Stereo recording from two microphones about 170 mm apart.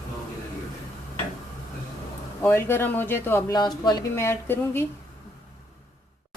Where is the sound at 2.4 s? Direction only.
15° left (ahead or behind).